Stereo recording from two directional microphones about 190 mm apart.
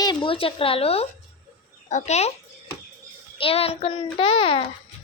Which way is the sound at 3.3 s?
30° left (ahead or behind).